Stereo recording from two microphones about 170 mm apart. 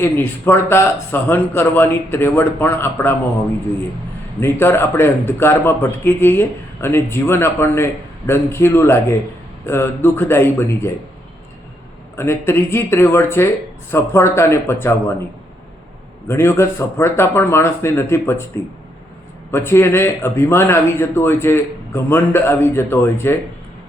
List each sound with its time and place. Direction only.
0.0 s speech: 15° left (ahead or behind)
4.4 s speech: 15° left (ahead or behind)
12.1 s speech: 15° left (ahead or behind)
16.3 s speech: 15° left (ahead or behind)